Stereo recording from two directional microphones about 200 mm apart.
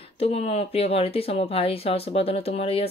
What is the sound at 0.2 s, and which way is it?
Speech, 35° left (ahead or behind).